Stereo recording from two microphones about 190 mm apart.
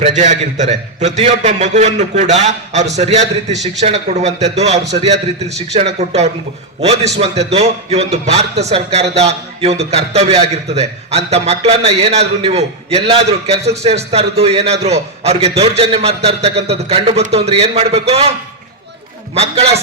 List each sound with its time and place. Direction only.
0.0 s a man's voice: 40° right (ahead or behind)